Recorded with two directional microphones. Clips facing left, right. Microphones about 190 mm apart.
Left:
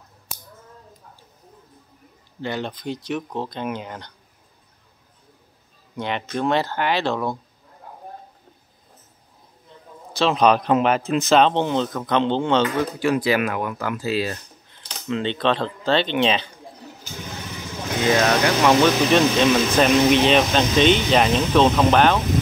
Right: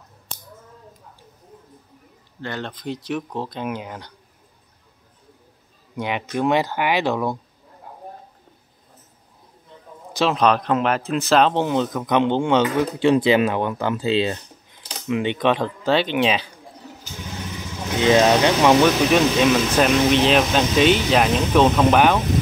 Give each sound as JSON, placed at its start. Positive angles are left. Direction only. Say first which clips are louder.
{"t": 2.4, "sound": "speech", "louder": "left 3 dB", "side_deg": 10}
{"t": 2.8, "sound": "speech", "louder": "even", "side_deg": -5}
{"t": 5.9, "sound": "speech", "louder": "right 2 dB", "side_deg": -10}
{"t": 10.3, "sound": "speech", "louder": "left 3 dB", "side_deg": 5}
{"t": 13.0, "sound": "speech", "louder": "right 5 dB", "side_deg": -25}
{"t": 18.0, "sound": "speech", "louder": "right 3 dB", "side_deg": -20}
{"t": 19.8, "sound": "speech", "louder": "left 1 dB", "side_deg": 0}